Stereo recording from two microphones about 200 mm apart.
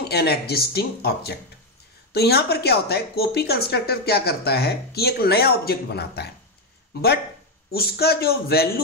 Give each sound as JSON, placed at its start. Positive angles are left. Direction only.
{"t": 0.0, "sound": "a woman's voice", "side_deg": 50}
{"t": 7.7, "sound": "a woman's voice", "side_deg": 50}